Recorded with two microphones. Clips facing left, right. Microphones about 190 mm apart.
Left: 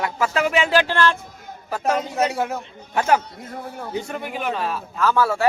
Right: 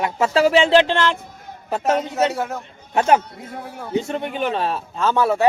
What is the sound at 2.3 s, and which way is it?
Speech, centre (ahead or behind).